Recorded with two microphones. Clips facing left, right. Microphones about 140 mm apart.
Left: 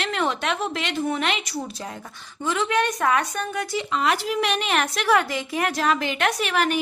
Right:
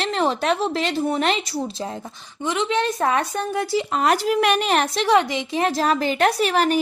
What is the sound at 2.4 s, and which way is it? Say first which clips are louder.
Speech: right 1 dB; 20° right (ahead or behind).